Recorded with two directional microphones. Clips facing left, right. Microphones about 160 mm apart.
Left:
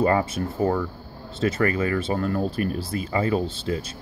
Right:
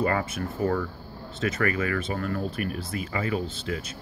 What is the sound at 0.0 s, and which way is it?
Speech, 30° left (ahead or behind).